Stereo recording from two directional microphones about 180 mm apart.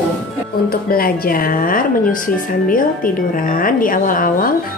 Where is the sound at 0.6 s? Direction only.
55° left (ahead or behind).